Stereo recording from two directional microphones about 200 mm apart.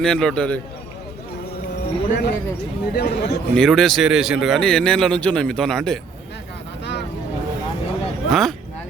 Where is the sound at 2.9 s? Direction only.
55° left (ahead or behind).